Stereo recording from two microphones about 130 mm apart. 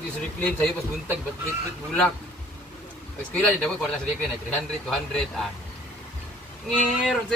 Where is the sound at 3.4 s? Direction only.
10° left (ahead or behind).